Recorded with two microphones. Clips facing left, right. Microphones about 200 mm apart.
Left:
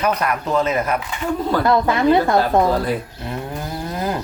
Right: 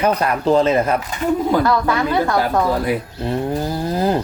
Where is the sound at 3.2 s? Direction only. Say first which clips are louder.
Right 7 dB; 30° right (ahead or behind).